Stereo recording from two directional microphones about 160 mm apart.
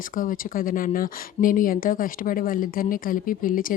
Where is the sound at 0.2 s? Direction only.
60° left (ahead or behind).